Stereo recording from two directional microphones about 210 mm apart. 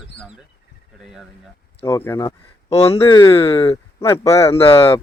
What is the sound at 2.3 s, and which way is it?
Speech, 30° left (ahead or behind).